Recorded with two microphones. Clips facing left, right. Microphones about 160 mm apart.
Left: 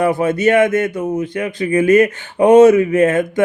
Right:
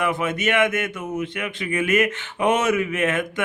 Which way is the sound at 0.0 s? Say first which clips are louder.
Left 9 dB; 40° left (ahead or behind).